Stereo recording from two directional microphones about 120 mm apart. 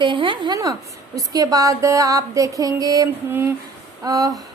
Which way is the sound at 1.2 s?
30° right (ahead or behind).